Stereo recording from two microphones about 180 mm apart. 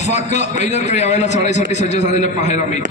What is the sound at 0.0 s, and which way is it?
A man's voice, 40° left (ahead or behind).